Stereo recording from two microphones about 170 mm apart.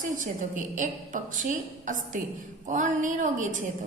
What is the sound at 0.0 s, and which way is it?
A woman's voice, 50° right (ahead or behind).